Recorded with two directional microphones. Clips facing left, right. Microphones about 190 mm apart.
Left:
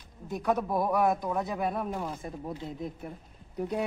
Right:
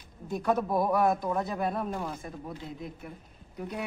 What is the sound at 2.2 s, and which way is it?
Speech, 20° left (ahead or behind).